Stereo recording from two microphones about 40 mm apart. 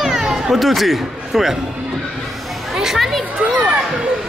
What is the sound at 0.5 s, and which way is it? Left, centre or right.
Speech, centre.